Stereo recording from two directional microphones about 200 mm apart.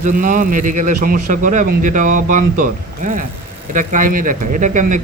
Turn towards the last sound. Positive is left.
turn(degrees=-40)  # may be behind; listen again after turning